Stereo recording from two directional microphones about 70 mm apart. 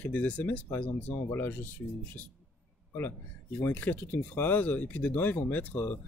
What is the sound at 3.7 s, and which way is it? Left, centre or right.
Speech, left.